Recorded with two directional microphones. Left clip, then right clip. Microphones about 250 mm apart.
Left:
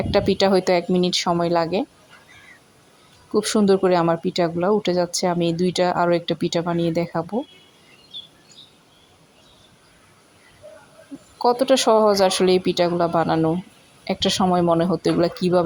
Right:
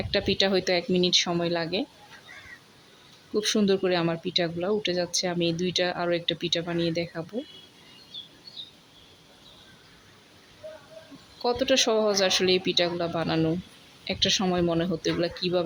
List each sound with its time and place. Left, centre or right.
0.1 s speech: centre
3.3 s speech: centre
11.4 s speech: centre